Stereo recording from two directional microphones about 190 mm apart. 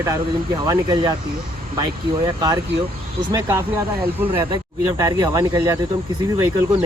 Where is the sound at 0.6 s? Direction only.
20° right (ahead or behind).